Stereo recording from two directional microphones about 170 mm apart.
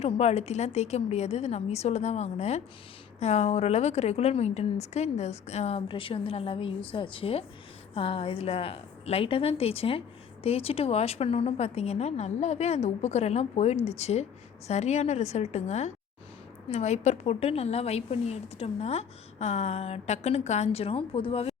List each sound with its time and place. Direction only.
0.0 s a woman's voice: 40° left (ahead or behind)